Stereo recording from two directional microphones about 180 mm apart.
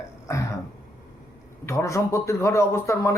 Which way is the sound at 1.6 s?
15° left (ahead or behind).